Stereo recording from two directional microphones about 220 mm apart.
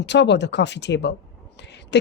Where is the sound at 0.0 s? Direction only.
50° left (ahead or behind).